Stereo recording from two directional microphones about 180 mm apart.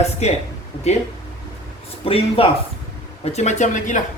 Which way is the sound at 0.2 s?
35° left (ahead or behind).